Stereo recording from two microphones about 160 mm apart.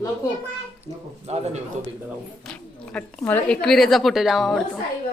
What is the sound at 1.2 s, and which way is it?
Speech, 40° right (ahead or behind).